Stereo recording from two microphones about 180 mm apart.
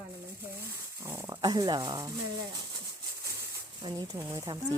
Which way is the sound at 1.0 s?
15° right (ahead or behind).